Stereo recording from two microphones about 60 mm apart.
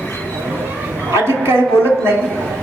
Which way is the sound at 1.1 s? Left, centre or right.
Right.